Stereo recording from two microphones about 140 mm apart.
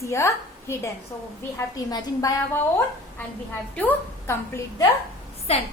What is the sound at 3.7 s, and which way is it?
Speech, 10° left (ahead or behind).